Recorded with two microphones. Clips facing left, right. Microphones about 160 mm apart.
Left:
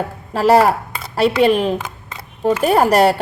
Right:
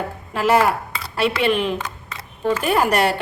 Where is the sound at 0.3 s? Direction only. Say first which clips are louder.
Left 5 dB; 35° left (ahead or behind).